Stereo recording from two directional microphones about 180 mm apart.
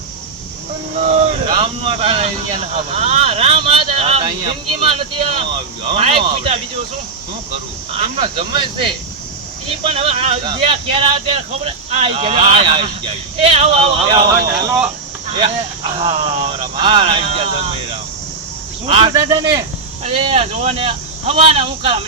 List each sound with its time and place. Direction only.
0.9 s a sound: 40° right (ahead or behind)
1.5 s speech: 30° right (ahead or behind)
7.9 s speech: 30° right (ahead or behind)
16.0 s speech: 35° right (ahead or behind)
18.9 s speech: 30° right (ahead or behind)
19.1 s speech: 15° right (ahead or behind)
20.1 s speech: 30° right (ahead or behind)